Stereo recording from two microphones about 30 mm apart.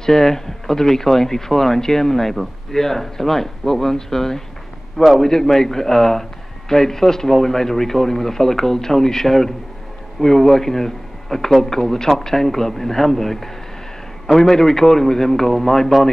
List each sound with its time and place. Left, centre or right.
0.0 s speech: centre